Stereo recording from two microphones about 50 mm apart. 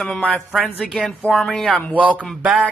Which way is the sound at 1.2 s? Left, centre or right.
Left.